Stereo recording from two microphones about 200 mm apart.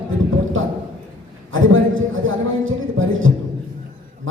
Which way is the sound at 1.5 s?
80° right.